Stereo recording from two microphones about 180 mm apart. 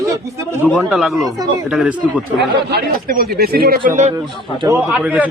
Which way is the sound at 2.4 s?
60° right (ahead or behind).